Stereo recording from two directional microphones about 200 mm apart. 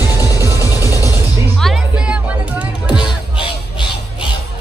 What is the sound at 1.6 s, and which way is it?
Music, 5° right (ahead or behind).